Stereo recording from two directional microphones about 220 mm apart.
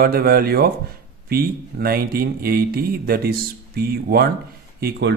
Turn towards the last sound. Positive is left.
turn(degrees=-50)  # may be behind; listen again after turning